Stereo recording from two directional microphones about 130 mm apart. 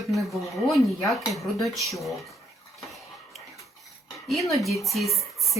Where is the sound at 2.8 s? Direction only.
Centre (ahead or behind).